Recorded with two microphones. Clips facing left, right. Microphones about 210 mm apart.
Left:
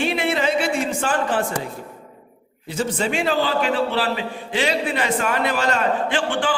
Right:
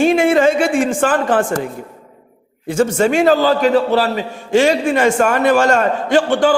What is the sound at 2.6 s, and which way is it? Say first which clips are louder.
A man's voice: right 9 dB; 45° right (ahead or behind).